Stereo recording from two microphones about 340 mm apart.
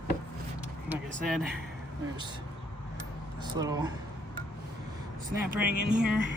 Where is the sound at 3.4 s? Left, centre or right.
Centre.